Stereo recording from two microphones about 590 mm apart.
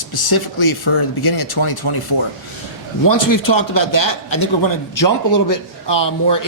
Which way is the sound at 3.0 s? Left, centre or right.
Left.